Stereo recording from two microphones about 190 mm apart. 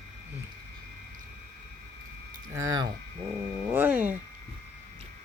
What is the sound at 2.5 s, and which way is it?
Speech, 15° right (ahead or behind).